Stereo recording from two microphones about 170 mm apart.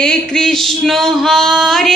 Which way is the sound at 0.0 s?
5° left (ahead or behind).